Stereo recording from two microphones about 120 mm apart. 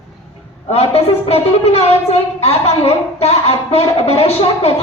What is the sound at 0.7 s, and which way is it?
A woman's voice, 60° left (ahead or behind).